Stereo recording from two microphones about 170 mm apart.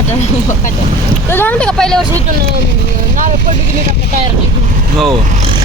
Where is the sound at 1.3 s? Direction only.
10° left (ahead or behind).